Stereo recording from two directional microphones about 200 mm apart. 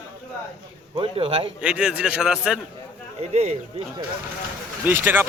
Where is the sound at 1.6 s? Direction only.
5° right (ahead or behind).